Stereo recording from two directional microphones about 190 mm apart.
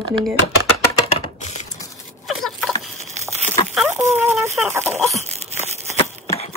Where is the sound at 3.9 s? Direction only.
15° right (ahead or behind).